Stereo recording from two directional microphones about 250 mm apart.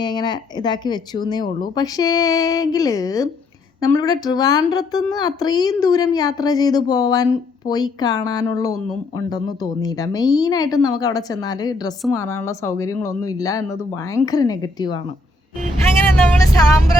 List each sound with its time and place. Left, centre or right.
0.0 s speech: centre
12.0 s speech: centre
12.5 s speech: centre
16.3 s speech: centre